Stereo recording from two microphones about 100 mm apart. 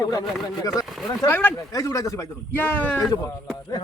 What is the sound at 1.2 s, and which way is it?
Speech, 20° left (ahead or behind).